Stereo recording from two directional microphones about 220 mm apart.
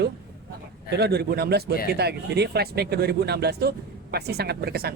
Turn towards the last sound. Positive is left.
turn(degrees=-45)  # may be behind; listen again after turning